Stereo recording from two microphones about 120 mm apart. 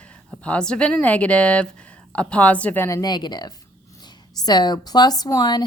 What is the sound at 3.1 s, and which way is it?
A woman's voice, 35° left (ahead or behind).